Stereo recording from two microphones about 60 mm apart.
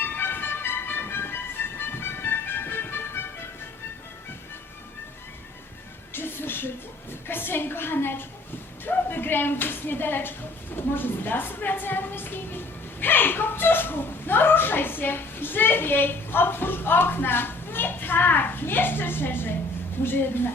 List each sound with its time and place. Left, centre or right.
0.0 s music: left
6.1 s a sound: left
8.8 s a woman's voice: left